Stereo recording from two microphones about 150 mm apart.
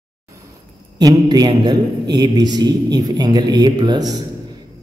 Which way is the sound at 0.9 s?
25° right (ahead or behind).